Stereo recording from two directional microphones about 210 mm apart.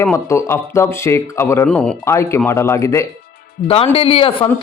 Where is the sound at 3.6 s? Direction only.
30° left (ahead or behind).